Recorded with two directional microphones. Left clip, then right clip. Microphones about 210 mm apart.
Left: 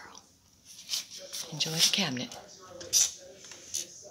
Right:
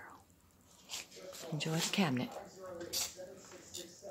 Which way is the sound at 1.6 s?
15° right (ahead or behind).